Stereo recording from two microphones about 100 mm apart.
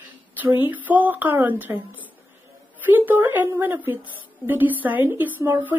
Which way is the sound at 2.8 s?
20° right (ahead or behind).